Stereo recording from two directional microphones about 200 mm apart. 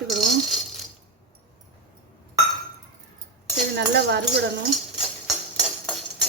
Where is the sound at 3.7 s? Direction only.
55° right (ahead or behind).